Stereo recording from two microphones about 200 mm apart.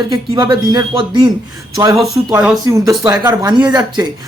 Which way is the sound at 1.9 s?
Centre (ahead or behind).